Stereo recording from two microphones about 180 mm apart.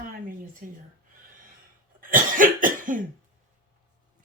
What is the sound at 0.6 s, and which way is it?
Speech, 45° right (ahead or behind).